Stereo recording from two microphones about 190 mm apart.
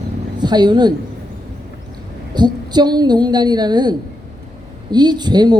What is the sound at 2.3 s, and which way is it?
Speech, 20° right (ahead or behind).